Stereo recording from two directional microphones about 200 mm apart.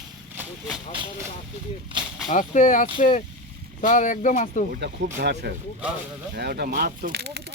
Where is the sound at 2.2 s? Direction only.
40° left (ahead or behind).